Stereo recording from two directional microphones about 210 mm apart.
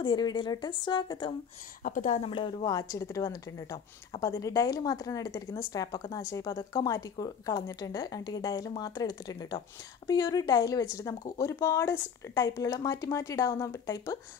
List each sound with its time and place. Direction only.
0.0 s speech: 20° left (ahead or behind)
1.8 s a woman's voice: 40° left (ahead or behind); by 14.1 s 15° left (ahead or behind)